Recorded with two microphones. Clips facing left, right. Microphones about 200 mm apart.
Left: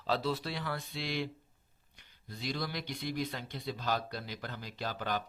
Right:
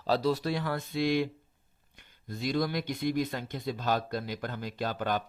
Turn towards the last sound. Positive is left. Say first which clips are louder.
# right 5 dB
turn(degrees=-50)  # may be behind; listen again after turning